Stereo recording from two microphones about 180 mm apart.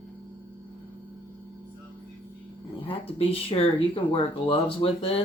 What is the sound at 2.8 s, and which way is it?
Speech, 30° left (ahead or behind).